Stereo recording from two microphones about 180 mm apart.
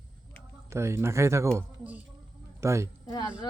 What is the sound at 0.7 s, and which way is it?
A man's voice, 15° right (ahead or behind).